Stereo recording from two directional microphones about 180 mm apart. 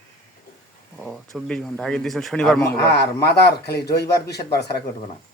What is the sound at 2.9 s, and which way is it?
Speech, 65° left (ahead or behind).